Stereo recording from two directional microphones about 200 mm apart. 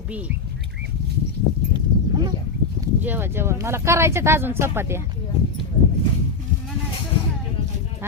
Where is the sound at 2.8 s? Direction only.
10° right (ahead or behind).